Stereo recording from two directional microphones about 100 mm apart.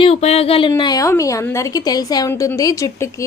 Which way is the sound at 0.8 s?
45° left (ahead or behind).